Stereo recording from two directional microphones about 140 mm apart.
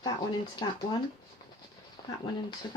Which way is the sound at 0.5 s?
30° left (ahead or behind).